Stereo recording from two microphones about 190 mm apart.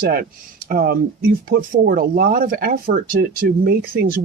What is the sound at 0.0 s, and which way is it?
Speech, 55° right (ahead or behind).